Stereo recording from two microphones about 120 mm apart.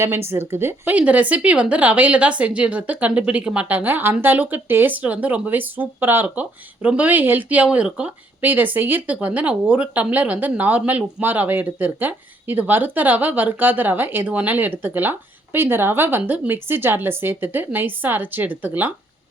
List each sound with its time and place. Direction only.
0.0 s speech: 20° right (ahead or behind)